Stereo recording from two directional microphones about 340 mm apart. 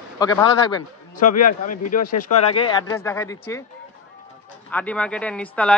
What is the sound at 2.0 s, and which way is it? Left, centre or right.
Speech, left.